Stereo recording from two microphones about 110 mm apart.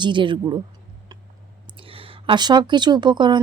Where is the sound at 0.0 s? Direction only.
45° right (ahead or behind).